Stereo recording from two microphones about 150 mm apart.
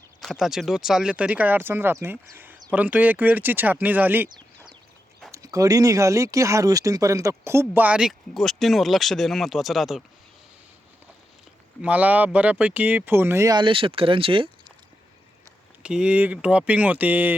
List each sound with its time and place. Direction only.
0.2 s speech: centre (ahead or behind)
5.3 s speech: 20° right (ahead or behind); by 10.0 s centre (ahead or behind)
11.8 s speech: 10° right (ahead or behind); by 14.5 s 35° right (ahead or behind)
15.8 s speech: 5° right (ahead or behind)